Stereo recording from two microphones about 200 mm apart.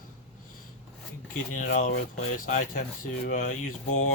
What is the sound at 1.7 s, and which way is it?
Speech, 40° left (ahead or behind).